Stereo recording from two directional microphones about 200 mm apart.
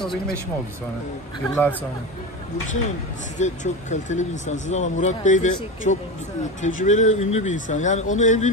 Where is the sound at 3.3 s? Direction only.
35° left (ahead or behind).